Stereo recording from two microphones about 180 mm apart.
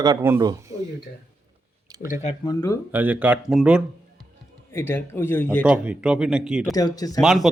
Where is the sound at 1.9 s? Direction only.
15° right (ahead or behind).